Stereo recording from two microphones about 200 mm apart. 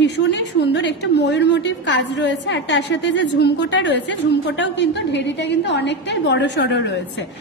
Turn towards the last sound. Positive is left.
turn(degrees=60)  # may be behind; listen again after turning